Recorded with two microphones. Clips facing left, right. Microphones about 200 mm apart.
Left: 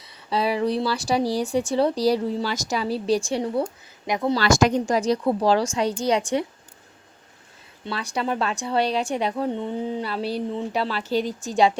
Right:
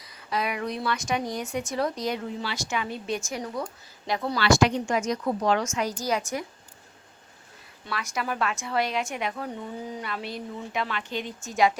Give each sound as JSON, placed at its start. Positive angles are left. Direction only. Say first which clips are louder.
{"t": 0.0, "sound": "speech", "louder": "left 5 dB", "side_deg": 30}
{"t": 4.4, "sound": "speech", "louder": "left 1 dB", "side_deg": 45}
{"t": 7.9, "sound": "speech", "louder": "left 5 dB", "side_deg": 30}